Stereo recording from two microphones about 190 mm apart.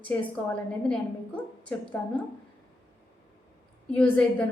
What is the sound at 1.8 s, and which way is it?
Speech, 10° left (ahead or behind).